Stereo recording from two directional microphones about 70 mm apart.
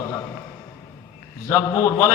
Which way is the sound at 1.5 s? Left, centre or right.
Left.